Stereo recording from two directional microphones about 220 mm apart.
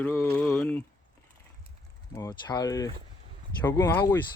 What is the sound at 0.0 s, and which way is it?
Speech, 10° left (ahead or behind).